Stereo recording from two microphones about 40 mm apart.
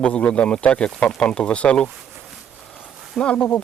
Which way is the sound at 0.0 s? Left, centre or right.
Left.